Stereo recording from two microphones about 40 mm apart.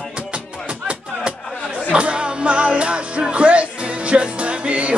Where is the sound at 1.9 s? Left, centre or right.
Right.